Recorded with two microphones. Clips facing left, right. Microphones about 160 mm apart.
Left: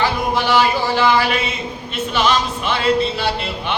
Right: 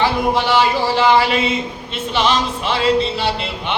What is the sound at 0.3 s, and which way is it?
Music, 25° right (ahead or behind).